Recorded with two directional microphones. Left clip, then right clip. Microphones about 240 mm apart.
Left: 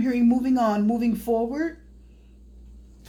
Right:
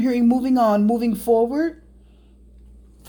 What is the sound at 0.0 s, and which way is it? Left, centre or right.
Speech, right.